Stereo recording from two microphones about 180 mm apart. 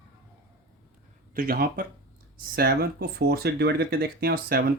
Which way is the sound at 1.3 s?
55° right (ahead or behind).